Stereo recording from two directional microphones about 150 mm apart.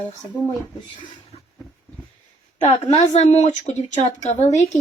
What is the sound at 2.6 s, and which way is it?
A woman's voice, 45° left (ahead or behind).